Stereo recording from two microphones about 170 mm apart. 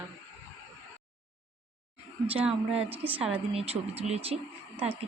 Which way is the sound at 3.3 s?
35° right (ahead or behind).